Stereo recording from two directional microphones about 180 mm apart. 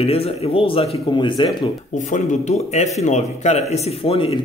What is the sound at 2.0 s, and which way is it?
A man's voice, 40° left (ahead or behind).